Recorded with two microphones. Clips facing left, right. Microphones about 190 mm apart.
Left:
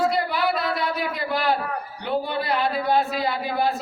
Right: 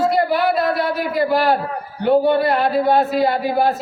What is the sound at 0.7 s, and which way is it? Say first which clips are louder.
Speech: right 6 dB; 50° right (ahead or behind).